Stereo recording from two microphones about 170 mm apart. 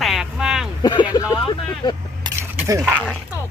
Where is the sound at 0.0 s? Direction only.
Centre (ahead or behind).